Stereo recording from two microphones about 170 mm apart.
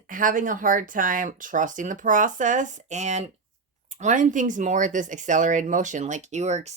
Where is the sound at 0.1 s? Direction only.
50° right (ahead or behind).